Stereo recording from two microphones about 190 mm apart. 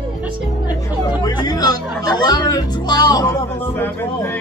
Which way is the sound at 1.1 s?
20° left (ahead or behind).